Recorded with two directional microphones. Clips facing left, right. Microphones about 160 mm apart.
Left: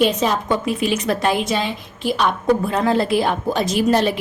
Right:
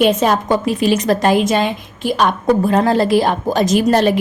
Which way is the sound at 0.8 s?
40° right (ahead or behind).